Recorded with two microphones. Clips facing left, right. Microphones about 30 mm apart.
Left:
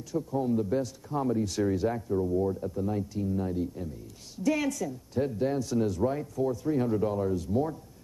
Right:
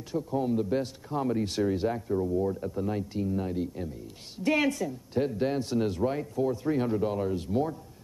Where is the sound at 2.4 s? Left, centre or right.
Right.